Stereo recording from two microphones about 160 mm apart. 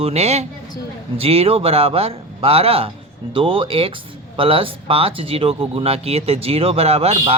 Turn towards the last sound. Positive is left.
turn(degrees=-40)  # may be behind; listen again after turning